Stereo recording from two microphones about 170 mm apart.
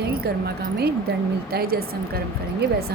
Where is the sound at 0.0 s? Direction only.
70° right (ahead or behind).